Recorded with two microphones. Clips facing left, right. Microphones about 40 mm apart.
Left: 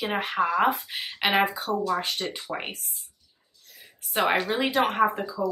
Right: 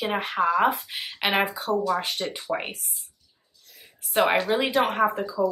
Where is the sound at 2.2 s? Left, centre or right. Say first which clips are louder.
Right 3 dB; right.